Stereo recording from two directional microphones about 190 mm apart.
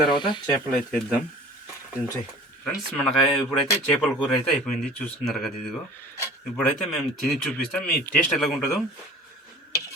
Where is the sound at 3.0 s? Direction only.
Centre (ahead or behind).